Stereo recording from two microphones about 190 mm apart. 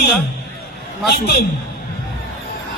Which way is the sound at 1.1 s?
55° left (ahead or behind).